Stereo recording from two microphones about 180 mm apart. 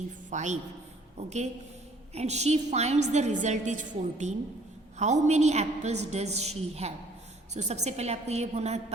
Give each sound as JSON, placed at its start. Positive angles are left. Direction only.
{"t": 0.3, "sound": "a woman's voice", "side_deg": -40}
{"t": 2.1, "sound": "a woman's voice", "side_deg": -40}